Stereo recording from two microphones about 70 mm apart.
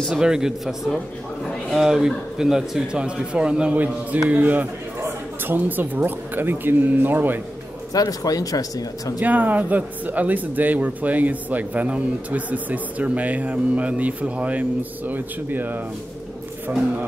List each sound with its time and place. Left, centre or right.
0.2 s a man's voice: centre
1.8 s a man's voice: centre; by 7.3 s right
7.9 s speech: left
9.2 s speech: right